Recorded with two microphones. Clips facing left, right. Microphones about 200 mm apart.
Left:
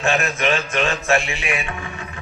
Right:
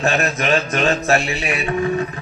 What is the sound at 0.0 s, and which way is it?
Music, 40° right (ahead or behind).